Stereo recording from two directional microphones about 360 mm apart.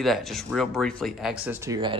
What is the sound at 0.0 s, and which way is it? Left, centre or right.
Speech, centre.